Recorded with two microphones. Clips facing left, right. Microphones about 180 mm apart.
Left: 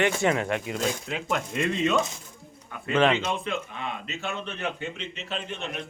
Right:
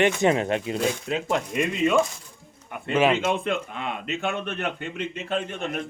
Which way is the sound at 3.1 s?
55° right (ahead or behind).